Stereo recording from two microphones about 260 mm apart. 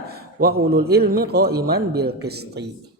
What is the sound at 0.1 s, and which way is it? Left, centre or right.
A man's voice, right.